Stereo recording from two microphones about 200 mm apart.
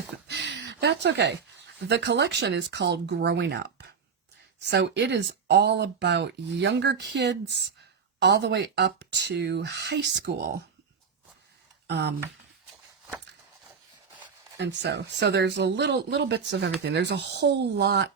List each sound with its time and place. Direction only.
0.3 s speech: 60° right (ahead or behind)
11.9 s speech: 55° right (ahead or behind)
14.6 s speech: 60° right (ahead or behind)